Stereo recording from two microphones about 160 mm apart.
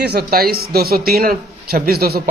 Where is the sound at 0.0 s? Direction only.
90° right.